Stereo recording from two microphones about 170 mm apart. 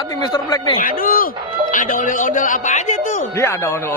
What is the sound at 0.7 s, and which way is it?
A man's voice, 55° left (ahead or behind).